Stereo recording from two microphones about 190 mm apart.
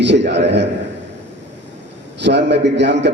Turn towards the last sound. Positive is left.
turn(degrees=-65)  # may be behind; listen again after turning